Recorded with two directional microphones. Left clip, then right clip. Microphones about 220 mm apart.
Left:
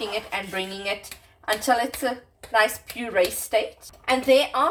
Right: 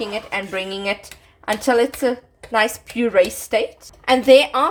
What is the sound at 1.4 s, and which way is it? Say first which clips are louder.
Speech: right 5 dB; 50° right (ahead or behind).